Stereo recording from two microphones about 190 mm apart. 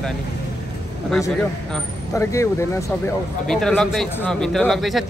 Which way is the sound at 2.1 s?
15° left (ahead or behind).